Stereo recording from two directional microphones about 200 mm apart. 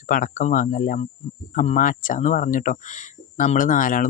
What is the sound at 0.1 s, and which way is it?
Speech, 40° left (ahead or behind).